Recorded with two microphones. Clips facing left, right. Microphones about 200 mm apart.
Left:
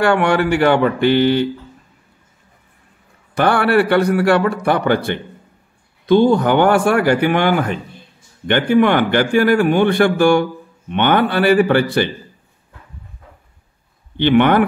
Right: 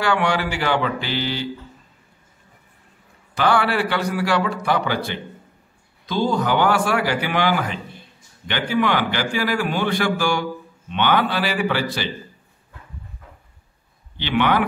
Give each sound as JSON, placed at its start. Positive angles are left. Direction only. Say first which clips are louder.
{"t": 0.0, "sound": "a man's voice", "louder": "left 6 dB", "side_deg": 55}
{"t": 3.3, "sound": "a man's voice", "louder": "left 5 dB", "side_deg": 55}
{"t": 14.1, "sound": "speech", "louder": "left 7 dB", "side_deg": 55}